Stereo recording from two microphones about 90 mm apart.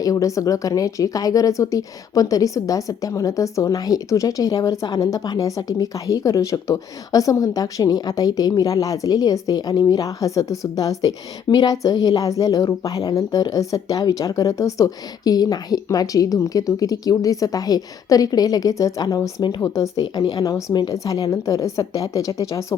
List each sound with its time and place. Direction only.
0.0 s a woman's voice: 40° left (ahead or behind)
19.6 s a woman's voice: 35° left (ahead or behind)